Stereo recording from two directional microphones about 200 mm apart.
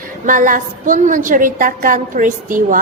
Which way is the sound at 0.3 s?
40° right (ahead or behind).